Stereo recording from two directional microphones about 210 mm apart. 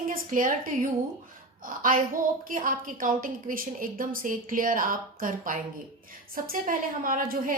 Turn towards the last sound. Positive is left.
turn(degrees=-40)  # may be behind; listen again after turning